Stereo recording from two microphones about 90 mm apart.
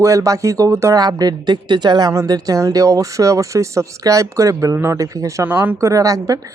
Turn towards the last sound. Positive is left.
turn(degrees=-40)  # may be behind; listen again after turning